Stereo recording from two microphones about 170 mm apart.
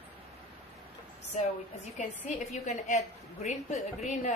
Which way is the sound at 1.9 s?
45° left (ahead or behind).